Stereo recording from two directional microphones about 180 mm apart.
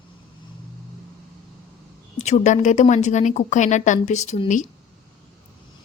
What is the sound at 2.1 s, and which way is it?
A woman's voice, 40° left (ahead or behind).